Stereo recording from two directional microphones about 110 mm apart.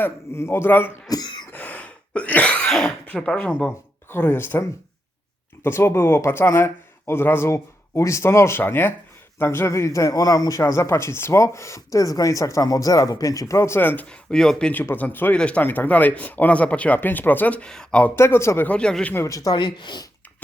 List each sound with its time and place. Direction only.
0.0 s a man's voice: 25° left (ahead or behind)
1.1 s cough: 40° left (ahead or behind)
1.5 s cough: 15° left (ahead or behind)
3.1 s a man's voice: 10° left (ahead or behind)
5.6 s a man's voice: 25° left (ahead or behind); by 19.1 s 5° left (ahead or behind)
19.1 s a man's voice: 30° left (ahead or behind)
19.5 s speech: 45° left (ahead or behind)